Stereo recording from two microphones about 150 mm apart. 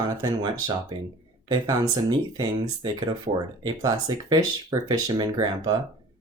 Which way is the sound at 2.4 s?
25° right (ahead or behind).